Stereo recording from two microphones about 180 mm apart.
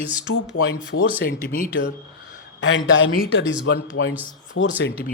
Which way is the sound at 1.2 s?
50° left (ahead or behind).